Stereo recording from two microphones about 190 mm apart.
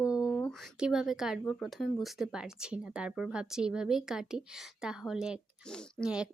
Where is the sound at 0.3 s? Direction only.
5° left (ahead or behind).